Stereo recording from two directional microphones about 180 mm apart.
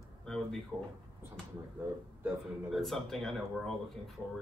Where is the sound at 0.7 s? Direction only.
10° right (ahead or behind).